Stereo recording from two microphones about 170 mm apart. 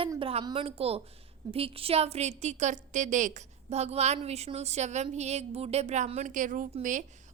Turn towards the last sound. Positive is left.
turn(degrees=-50)  # may be behind; listen again after turning